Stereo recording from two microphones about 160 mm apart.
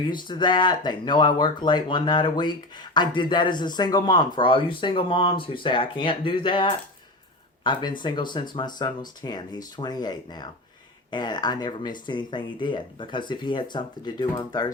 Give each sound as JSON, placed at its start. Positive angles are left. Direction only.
{"t": 0.0, "sound": "speech", "side_deg": 30}